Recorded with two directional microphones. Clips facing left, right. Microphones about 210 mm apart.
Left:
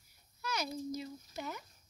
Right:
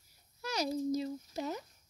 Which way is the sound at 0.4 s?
40° right (ahead or behind).